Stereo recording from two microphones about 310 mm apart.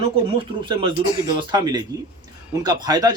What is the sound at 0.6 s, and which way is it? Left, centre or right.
Speech, centre.